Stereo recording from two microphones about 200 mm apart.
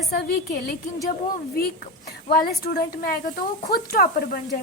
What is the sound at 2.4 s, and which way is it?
Speech, 50° left (ahead or behind).